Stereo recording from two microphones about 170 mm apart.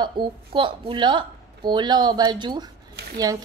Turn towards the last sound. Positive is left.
turn(degrees=-20)  # may be behind; listen again after turning